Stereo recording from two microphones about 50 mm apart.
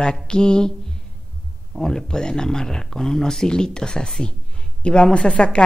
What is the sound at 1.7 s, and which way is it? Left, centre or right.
A woman's voice, centre.